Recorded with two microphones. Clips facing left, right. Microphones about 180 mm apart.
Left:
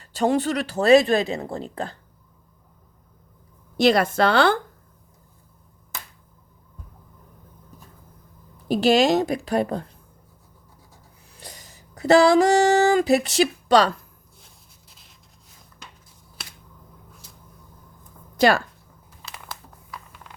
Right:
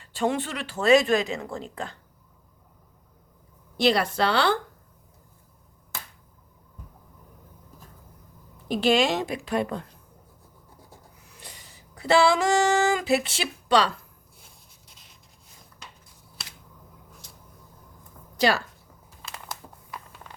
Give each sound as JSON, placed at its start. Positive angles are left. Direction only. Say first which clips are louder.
{"t": 0.0, "sound": "speech", "louder": "left 5 dB", "side_deg": 40}
{"t": 3.8, "sound": "a woman's voice", "louder": "left 4 dB", "side_deg": 50}
{"t": 8.6, "sound": "speech", "louder": "left 4 dB", "side_deg": 40}
{"t": 11.3, "sound": "a sound", "louder": "left 5 dB", "side_deg": 35}
{"t": 14.8, "sound": "a sound", "louder": "even", "side_deg": 0}
{"t": 18.3, "sound": "speech", "louder": "left 5 dB", "side_deg": 50}